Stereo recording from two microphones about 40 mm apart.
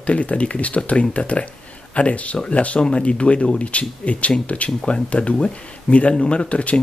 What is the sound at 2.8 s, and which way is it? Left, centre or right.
Speech, left.